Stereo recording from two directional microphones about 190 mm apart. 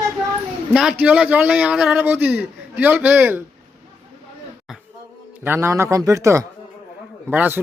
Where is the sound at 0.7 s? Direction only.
5° right (ahead or behind).